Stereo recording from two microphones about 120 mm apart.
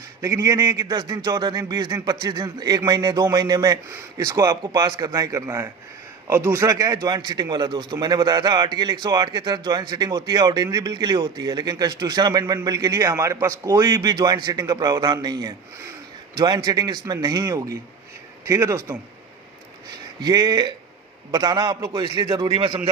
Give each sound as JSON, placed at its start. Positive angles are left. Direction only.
{"t": 0.2, "sound": "a man's voice", "side_deg": -30}
{"t": 20.2, "sound": "a man's voice", "side_deg": -35}